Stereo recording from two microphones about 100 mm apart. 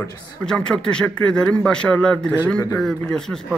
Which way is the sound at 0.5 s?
10° left (ahead or behind).